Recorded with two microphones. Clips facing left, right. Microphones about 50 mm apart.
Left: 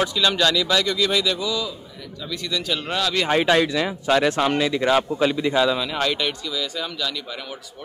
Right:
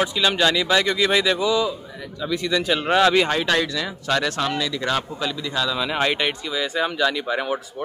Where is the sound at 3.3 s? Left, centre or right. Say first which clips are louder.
Left 3 dB; centre.